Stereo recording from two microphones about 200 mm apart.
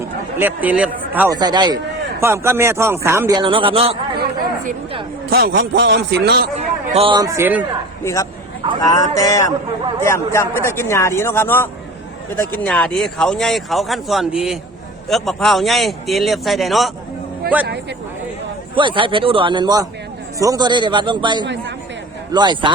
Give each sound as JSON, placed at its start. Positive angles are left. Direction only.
{"t": 0.3, "sound": "a man's voice", "side_deg": -10}
{"t": 1.3, "sound": "a man's voice", "side_deg": -20}
{"t": 5.3, "sound": "a man's voice", "side_deg": -50}
{"t": 6.9, "sound": "a man's voice", "side_deg": -25}
{"t": 8.0, "sound": "speech", "side_deg": 15}
{"t": 18.7, "sound": "a man's voice", "side_deg": -25}